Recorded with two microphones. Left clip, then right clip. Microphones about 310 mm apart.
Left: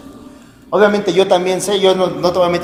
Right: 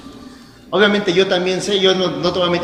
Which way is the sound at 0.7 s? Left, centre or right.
Centre.